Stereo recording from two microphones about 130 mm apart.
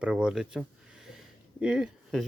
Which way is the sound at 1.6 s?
5° right (ahead or behind).